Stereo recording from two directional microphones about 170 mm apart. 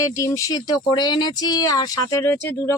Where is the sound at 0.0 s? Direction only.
20° left (ahead or behind).